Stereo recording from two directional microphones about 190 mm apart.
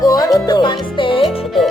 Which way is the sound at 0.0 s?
20° left (ahead or behind).